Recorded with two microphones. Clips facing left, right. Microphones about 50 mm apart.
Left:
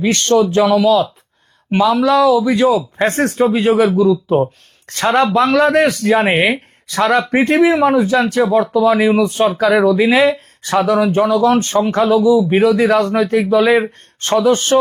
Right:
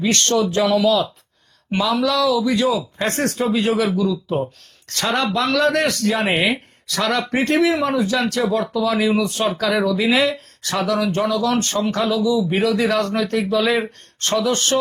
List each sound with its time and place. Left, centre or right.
0.2 s speech: centre
2.0 s speech: left
5.6 s speech: centre
6.1 s speech: left
7.3 s speech: centre